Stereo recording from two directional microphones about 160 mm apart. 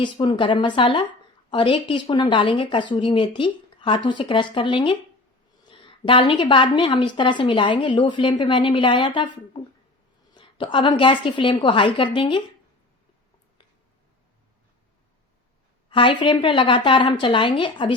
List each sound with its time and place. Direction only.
0.0 s a woman's voice: 30° left (ahead or behind)
15.9 s a woman's voice: 30° left (ahead or behind)